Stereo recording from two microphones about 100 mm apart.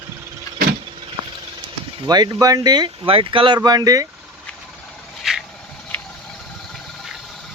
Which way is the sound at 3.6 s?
40° right (ahead or behind).